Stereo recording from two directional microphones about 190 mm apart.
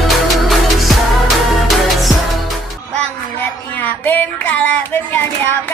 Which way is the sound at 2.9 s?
5° left (ahead or behind).